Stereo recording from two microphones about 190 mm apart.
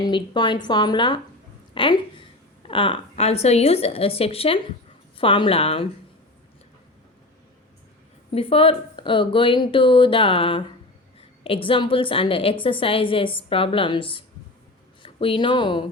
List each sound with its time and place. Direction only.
0.0 s a woman's voice: 25° left (ahead or behind)
8.3 s speech: 30° left (ahead or behind)